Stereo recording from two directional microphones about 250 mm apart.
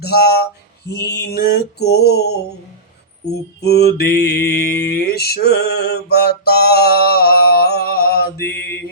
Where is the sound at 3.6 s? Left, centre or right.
Left.